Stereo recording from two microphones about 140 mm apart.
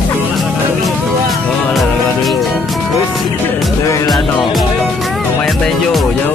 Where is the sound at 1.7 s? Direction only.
Centre (ahead or behind).